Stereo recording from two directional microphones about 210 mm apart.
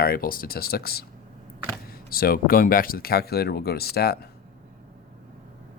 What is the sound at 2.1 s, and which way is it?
Speech, 45° left (ahead or behind).